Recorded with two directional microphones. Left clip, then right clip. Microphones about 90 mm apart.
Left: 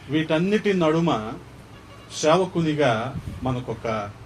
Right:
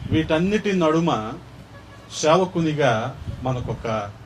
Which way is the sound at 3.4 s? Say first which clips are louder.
Right 1 dB; 30° left (ahead or behind).